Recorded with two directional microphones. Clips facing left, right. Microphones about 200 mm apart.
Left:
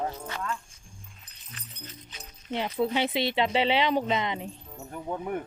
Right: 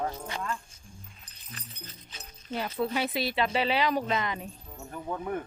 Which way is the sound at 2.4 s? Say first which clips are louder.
Left 3 dB; 25° left (ahead or behind).